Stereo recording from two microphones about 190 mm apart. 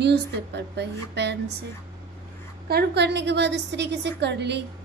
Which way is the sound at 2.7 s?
60° right (ahead or behind).